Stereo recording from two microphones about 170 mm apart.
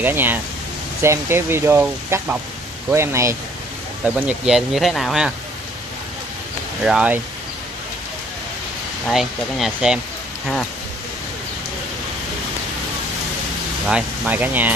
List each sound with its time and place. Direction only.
0.0 s speech: 10° right (ahead or behind)
4.0 s speech: 5° right (ahead or behind)
6.8 s speech: 5° right (ahead or behind)
9.0 s speech: centre (ahead or behind)
13.8 s speech: 5° right (ahead or behind)